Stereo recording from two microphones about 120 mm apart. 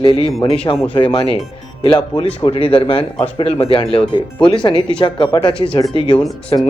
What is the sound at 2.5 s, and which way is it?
A man's voice, 50° left (ahead or behind).